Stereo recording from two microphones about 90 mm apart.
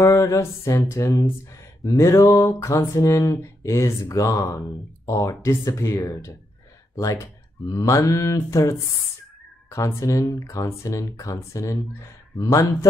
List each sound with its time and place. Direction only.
0.0 s mantra: 40° left (ahead or behind)
7.7 s mantra: 35° left (ahead or behind)